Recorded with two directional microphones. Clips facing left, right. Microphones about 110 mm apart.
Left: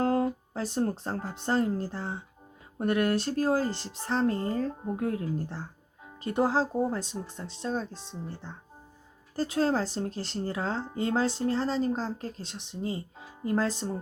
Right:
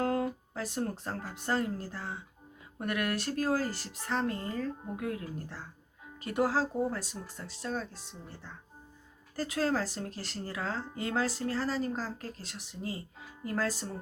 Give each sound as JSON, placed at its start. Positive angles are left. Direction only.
{"t": 0.0, "sound": "speech", "side_deg": 30}